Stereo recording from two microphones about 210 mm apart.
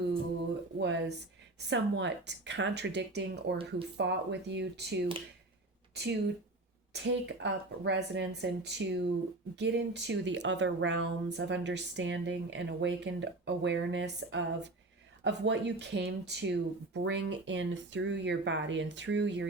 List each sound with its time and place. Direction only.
0.8 s speech: 55° right (ahead or behind)